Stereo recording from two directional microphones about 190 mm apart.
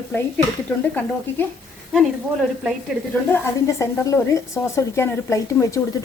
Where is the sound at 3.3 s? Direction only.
15° left (ahead or behind).